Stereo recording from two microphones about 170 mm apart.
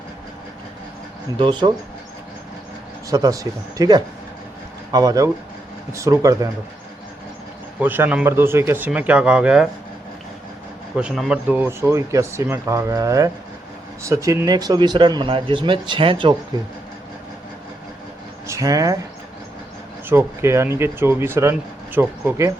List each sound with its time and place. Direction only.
1.4 s speech: 30° right (ahead or behind)
3.1 s speech: 20° right (ahead or behind)
7.8 s speech: 10° right (ahead or behind)
10.9 s speech: centre (ahead or behind); by 16.3 s 30° right (ahead or behind)
18.4 s speech: 20° right (ahead or behind)
20.1 s speech: 15° right (ahead or behind)